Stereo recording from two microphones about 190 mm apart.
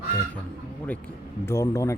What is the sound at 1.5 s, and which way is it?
Speech, 15° left (ahead or behind).